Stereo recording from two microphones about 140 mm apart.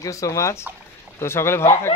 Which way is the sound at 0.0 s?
25° left (ahead or behind).